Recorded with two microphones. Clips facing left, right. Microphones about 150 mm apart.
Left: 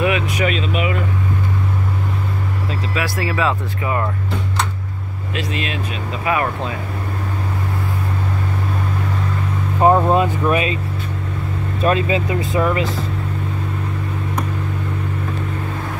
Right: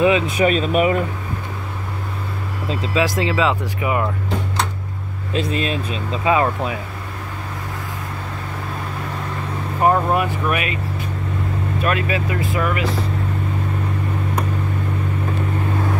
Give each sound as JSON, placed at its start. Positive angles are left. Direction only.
{"t": 0.0, "sound": "speech", "side_deg": -25}
{"t": 0.5, "sound": "speech", "side_deg": -45}
{"t": 2.7, "sound": "speech", "side_deg": -25}
{"t": 5.3, "sound": "speech", "side_deg": -35}
{"t": 6.2, "sound": "speech", "side_deg": -20}
{"t": 9.8, "sound": "speech", "side_deg": 20}
{"t": 11.8, "sound": "speech", "side_deg": 25}